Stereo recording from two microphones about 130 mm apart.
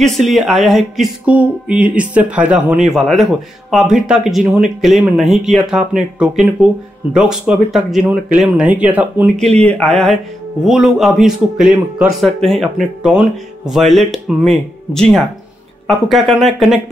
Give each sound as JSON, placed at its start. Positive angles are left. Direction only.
{"t": 0.0, "sound": "speech", "side_deg": 0}
{"t": 9.4, "sound": "speech", "side_deg": 10}